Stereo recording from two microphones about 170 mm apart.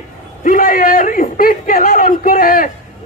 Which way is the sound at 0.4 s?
55° left (ahead or behind).